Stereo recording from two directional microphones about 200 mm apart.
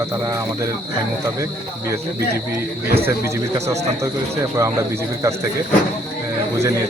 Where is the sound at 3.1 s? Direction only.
15° right (ahead or behind).